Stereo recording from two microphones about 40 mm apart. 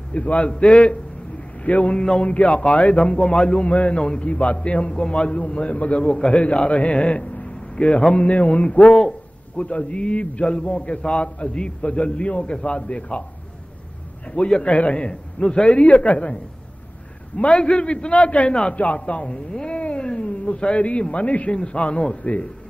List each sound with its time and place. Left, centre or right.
0.1 s a man's voice: left
2.0 s a man's voice: left
14.4 s a man's voice: left
15.0 s a man's voice: left
17.6 s a man's voice: left
18.5 s a man's voice: left